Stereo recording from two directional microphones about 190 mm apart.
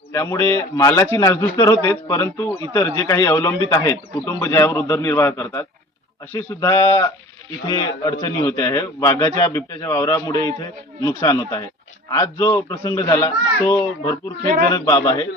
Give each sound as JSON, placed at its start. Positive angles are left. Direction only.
{"t": 0.1, "sound": "a man's voice", "side_deg": 15}